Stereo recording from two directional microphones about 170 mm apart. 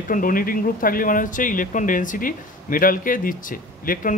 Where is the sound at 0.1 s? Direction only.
55° left (ahead or behind).